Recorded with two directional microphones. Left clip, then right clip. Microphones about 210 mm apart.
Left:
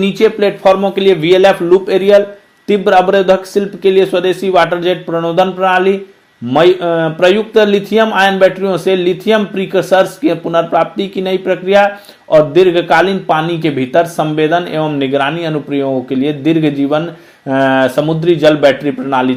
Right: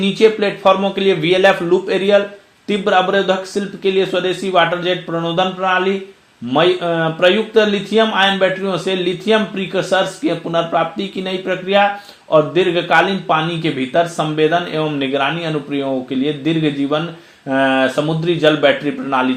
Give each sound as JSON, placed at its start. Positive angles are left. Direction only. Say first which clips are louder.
{"t": 0.0, "sound": "speech", "louder": "left 3 dB", "side_deg": 40}